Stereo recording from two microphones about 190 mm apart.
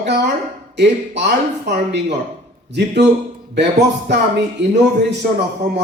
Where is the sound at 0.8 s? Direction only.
65° right (ahead or behind).